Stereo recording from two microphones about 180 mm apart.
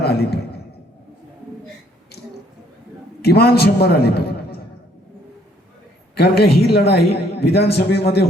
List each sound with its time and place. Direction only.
0.0 s a man's voice: 65° left (ahead or behind)
3.2 s a man's voice: 60° left (ahead or behind)
6.1 s a woman's voice: 60° left (ahead or behind)